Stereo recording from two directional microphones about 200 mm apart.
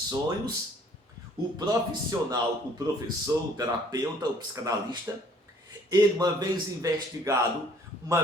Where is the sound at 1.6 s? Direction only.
20° right (ahead or behind).